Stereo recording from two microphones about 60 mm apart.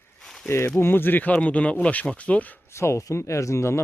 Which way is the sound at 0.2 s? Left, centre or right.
Centre.